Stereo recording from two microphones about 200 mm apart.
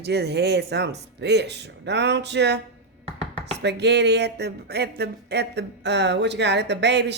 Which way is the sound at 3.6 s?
60° right (ahead or behind).